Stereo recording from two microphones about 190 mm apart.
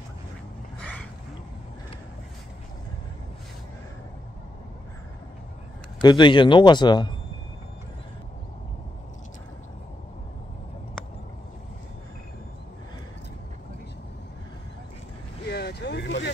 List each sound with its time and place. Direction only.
6.0 s a man's voice: 25° left (ahead or behind)
15.4 s vehicle: 60° left (ahead or behind)